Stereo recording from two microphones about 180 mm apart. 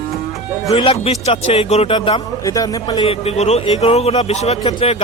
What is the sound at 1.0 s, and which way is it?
A man's voice, 35° left (ahead or behind).